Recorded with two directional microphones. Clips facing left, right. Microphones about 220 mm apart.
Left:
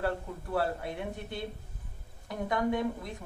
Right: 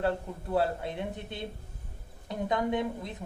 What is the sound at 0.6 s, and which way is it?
A woman's voice, 20° right (ahead or behind).